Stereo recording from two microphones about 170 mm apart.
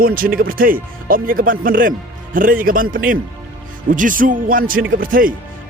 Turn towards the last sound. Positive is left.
turn(degrees=-55)  # may be behind; listen again after turning